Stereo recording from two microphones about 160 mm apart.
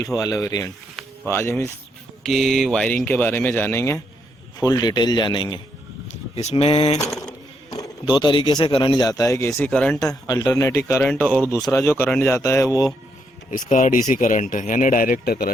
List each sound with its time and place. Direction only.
0.0 s speech: 20° left (ahead or behind)
2.2 s speech: centre (ahead or behind); by 5.5 s 30° left (ahead or behind)
6.3 s speech: 40° left (ahead or behind)
7.7 s speech: 25° left (ahead or behind)
9.5 s speech: 5° left (ahead or behind)
10.4 s speech: 20° left (ahead or behind)
13.5 s speech: 55° left (ahead or behind); by 15.4 s 70° left (ahead or behind)